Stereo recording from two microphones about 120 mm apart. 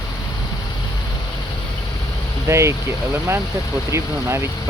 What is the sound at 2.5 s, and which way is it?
Speech, 25° right (ahead or behind).